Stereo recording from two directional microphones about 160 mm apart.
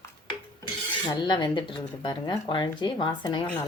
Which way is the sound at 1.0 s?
25° left (ahead or behind).